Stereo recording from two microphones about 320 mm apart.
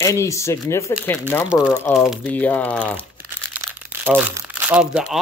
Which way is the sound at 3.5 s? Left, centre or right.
Centre.